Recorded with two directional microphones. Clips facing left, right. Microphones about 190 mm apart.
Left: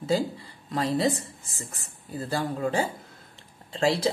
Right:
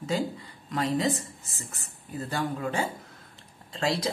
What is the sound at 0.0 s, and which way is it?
A woman's voice, 35° left (ahead or behind).